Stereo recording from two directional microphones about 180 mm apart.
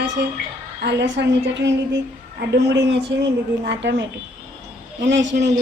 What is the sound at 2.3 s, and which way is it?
A woman's voice, 70° right (ahead or behind).